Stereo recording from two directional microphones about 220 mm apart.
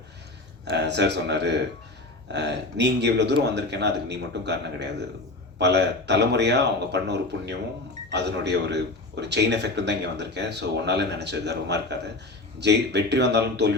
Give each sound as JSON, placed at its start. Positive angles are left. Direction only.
{"t": 0.7, "sound": "speech", "side_deg": -50}